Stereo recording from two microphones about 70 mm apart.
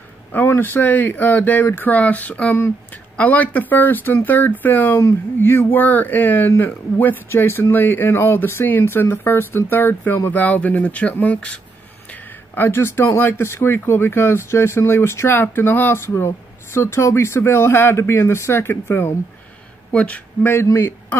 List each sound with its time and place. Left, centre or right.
0.3 s speech: left
10.3 s speech: left
12.1 s speech: left
19.9 s speech: centre
20.7 s a man's voice: left